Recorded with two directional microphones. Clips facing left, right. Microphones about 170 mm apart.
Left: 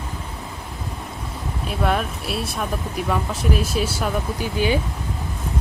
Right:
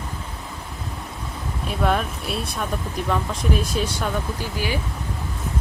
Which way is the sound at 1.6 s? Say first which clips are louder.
Even; centre (ahead or behind).